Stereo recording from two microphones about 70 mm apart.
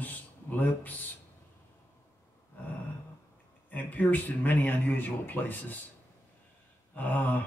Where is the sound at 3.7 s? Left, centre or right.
Left.